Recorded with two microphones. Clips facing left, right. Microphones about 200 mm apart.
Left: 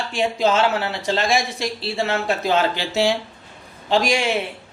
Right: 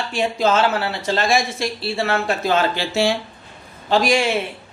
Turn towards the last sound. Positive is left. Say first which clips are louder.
# right 2 dB
turn(degrees=15)  # may be behind; listen again after turning